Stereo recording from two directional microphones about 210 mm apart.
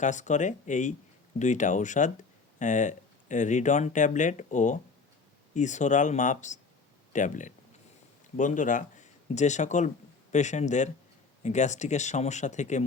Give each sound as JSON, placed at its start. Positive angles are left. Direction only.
{"t": 0.0, "sound": "speech", "side_deg": 35}